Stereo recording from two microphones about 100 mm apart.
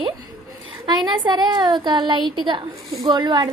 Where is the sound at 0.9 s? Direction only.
45° right (ahead or behind).